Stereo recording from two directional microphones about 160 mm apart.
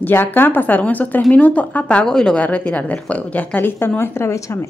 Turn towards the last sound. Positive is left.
turn(degrees=15)  # may be behind; listen again after turning